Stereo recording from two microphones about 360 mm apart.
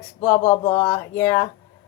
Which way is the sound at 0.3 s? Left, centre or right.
Centre.